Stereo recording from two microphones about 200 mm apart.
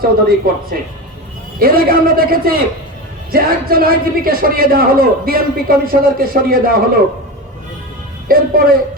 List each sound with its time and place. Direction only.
0.0 s a man's voice: 45° right (ahead or behind)
8.3 s a man's voice: 45° right (ahead or behind)